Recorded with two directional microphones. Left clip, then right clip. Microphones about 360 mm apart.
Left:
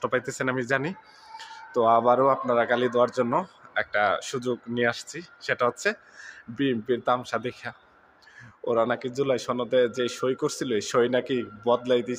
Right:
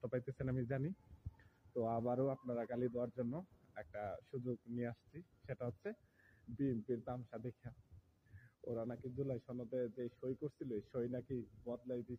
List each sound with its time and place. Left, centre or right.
0.0 s speech: right